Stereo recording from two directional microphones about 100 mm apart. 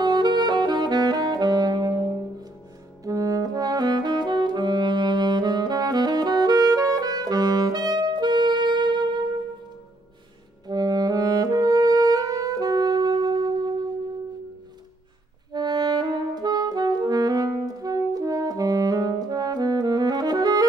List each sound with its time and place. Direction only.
0.0 s saxophone: 45° right (ahead or behind)
3.0 s saxophone: 35° right (ahead or behind)
10.7 s saxophone: 40° right (ahead or behind)
15.5 s saxophone: 45° right (ahead or behind)